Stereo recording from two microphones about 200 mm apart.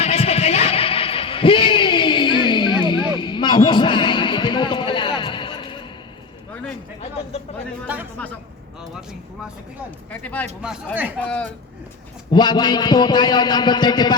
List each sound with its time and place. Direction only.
0.0 s a sound: 30° left (ahead or behind)
10.1 s speech: 10° left (ahead or behind)
12.3 s a man's voice: 20° left (ahead or behind)